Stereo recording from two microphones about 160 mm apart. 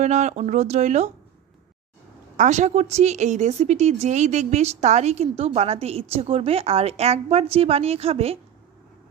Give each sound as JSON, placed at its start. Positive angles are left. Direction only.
{"t": 0.0, "sound": "speech", "side_deg": -45}
{"t": 2.3, "sound": "a woman's voice", "side_deg": -50}